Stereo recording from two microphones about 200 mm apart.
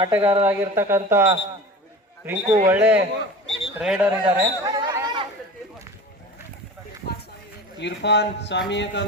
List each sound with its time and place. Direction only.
0.0 s a man's voice: 10° right (ahead or behind)
7.8 s speech: 60° left (ahead or behind)